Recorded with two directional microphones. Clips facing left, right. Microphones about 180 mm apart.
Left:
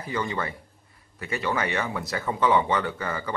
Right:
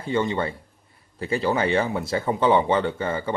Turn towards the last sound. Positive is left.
turn(degrees=-25)  # may be behind; listen again after turning